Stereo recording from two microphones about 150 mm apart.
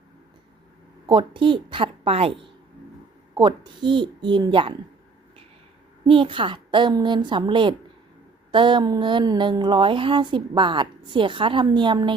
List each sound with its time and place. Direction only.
1.0 s speech: 30° right (ahead or behind)
6.1 s speech: 35° right (ahead or behind)